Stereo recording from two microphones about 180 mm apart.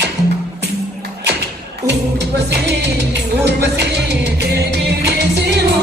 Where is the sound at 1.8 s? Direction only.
70° right (ahead or behind).